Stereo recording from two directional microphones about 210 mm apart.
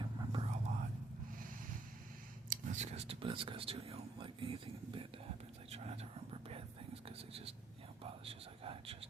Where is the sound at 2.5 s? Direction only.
35° right (ahead or behind).